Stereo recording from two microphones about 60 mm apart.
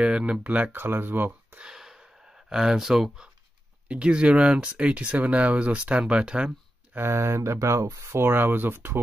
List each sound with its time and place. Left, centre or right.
0.0 s speech: centre
0.7 s speech: right
1.6 s a sound: centre
3.9 s speech: centre
7.1 s speech: right